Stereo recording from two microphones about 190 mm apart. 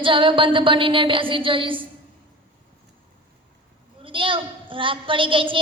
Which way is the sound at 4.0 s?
25° right (ahead or behind).